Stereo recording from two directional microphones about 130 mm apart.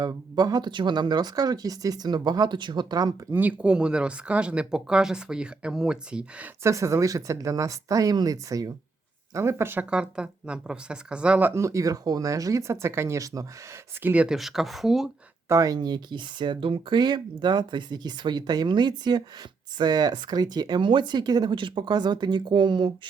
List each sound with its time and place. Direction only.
0.0 s speech: 30° right (ahead or behind)
3.3 s speech: 10° right (ahead or behind)
6.6 s speech: 25° right (ahead or behind)
14.0 s speech: 10° right (ahead or behind)
15.4 s speech: 25° right (ahead or behind)